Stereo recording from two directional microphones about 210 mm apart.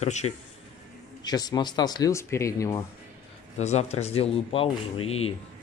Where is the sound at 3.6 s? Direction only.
30° left (ahead or behind).